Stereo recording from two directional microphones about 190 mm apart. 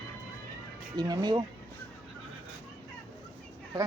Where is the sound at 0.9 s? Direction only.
20° right (ahead or behind).